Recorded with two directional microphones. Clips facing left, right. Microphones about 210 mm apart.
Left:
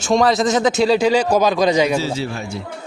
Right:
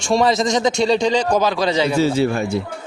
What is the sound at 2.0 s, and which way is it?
Speech, 55° right (ahead or behind).